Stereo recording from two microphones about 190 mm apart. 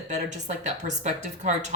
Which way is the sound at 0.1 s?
35° right (ahead or behind).